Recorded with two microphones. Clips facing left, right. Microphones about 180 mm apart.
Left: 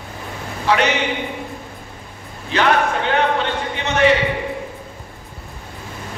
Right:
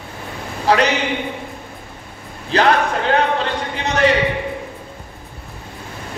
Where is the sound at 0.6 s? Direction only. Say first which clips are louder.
Right 2 dB; 35° right (ahead or behind).